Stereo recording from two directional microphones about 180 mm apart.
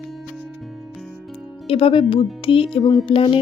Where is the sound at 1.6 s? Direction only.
30° left (ahead or behind).